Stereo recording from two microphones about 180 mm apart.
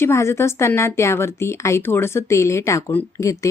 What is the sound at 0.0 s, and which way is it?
A woman's voice, 15° left (ahead or behind).